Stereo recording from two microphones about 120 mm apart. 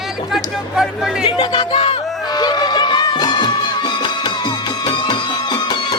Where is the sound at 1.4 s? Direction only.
45° left (ahead or behind).